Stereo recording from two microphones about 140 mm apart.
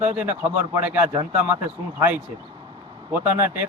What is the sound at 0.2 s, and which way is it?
Speech, 10° right (ahead or behind).